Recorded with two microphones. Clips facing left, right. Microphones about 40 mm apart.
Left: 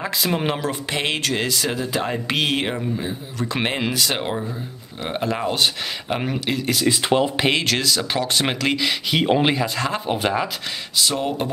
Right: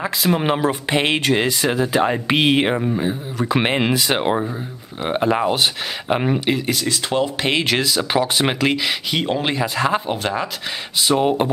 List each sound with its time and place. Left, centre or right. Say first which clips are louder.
0.0 s speech: right 3 dB; centre
0.6 s speech: right 5 dB; right
6.9 s speech: left 4 dB; centre
7.6 s speech: right 2 dB; centre
9.1 s speech: left 5 dB; centre
9.6 s speech: right 4 dB; centre
10.0 s speech: left 1 dB; centre
11.0 s speech: right 5 dB; right